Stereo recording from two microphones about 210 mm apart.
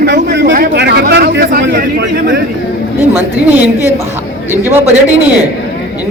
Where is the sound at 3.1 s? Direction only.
10° right (ahead or behind).